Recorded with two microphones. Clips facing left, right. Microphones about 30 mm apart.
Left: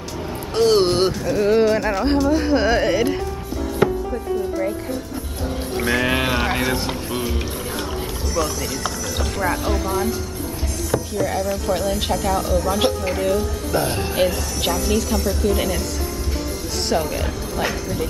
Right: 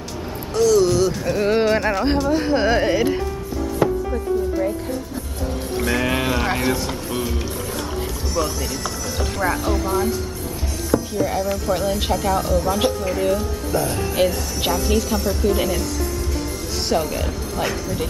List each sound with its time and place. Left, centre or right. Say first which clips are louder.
0.6 s a sound: even; left
1.2 s speech: left 2 dB; centre
3.8 s music: left 1 dB; left
5.8 s speech: left 1 dB; centre
6.4 s speech: even; centre
6.7 s speech: even; centre
8.3 s speech: left 1 dB; centre
9.5 s speech: right 1 dB; centre
10.8 s music: right 2 dB; centre
11.2 s a woman's voice: even; centre
13.7 s speech: left 1 dB; left
14.1 s speech: right 1 dB; centre
14.5 s speech: even; centre